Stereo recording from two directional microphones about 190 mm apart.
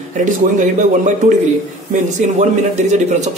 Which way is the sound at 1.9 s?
40° right (ahead or behind).